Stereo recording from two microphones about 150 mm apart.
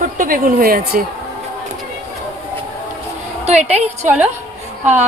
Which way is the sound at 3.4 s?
50° right (ahead or behind).